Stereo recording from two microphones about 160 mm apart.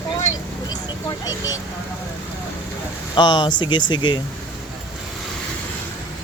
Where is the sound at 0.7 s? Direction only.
25° left (ahead or behind).